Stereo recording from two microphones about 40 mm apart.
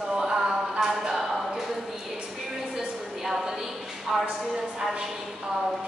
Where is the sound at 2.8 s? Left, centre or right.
Centre.